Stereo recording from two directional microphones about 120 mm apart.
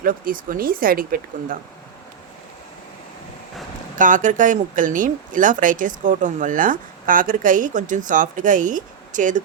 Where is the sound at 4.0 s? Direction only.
90° right.